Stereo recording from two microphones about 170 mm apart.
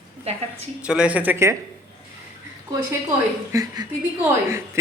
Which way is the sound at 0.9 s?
5° right (ahead or behind).